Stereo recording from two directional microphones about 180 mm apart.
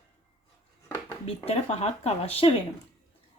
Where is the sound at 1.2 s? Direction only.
35° left (ahead or behind).